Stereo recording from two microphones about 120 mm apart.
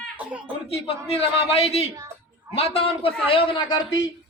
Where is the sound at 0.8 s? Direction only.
55° left (ahead or behind).